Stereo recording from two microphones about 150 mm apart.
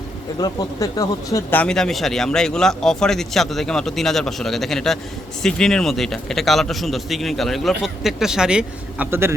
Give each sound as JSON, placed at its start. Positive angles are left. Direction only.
{"t": 0.3, "sound": "speech", "side_deg": 25}
{"t": 1.5, "sound": "a man's voice", "side_deg": 5}